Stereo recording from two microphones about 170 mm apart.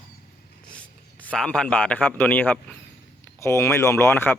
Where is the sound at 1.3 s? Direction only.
5° left (ahead or behind).